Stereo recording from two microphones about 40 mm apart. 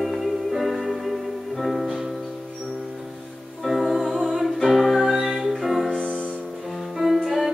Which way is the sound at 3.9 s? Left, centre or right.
Centre.